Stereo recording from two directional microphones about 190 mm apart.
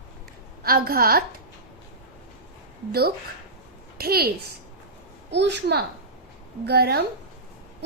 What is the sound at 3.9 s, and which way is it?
A woman's voice, 55° right (ahead or behind).